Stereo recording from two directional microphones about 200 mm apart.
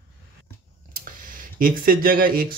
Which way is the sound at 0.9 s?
45° right (ahead or behind).